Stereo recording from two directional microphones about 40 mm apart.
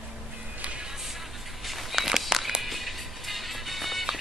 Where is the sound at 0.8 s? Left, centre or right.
Centre.